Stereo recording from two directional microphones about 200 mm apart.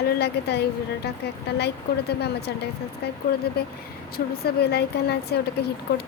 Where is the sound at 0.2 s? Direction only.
55° left (ahead or behind).